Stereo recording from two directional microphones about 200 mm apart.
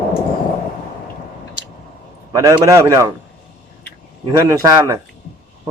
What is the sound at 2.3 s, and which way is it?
Speech, 15° right (ahead or behind).